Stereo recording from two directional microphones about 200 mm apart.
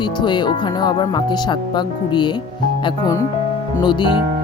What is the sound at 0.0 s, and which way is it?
Speech, 20° left (ahead or behind).